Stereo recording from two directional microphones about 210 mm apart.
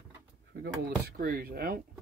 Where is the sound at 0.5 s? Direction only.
45° right (ahead or behind).